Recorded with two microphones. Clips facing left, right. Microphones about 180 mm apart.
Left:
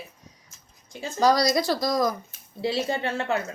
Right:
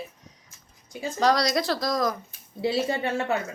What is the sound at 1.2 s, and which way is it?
Speech, centre (ahead or behind).